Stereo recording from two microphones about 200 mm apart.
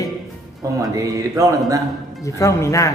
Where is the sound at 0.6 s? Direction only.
15° right (ahead or behind).